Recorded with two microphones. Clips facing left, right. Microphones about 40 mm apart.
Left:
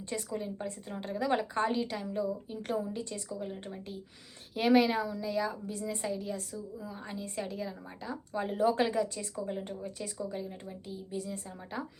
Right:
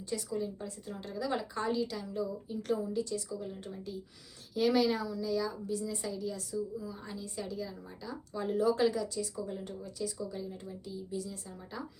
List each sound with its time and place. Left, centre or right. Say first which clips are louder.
0.0 s a woman's voice: right 1 dB; left